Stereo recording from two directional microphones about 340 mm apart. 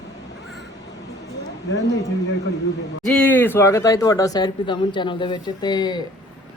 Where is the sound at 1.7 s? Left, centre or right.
Left.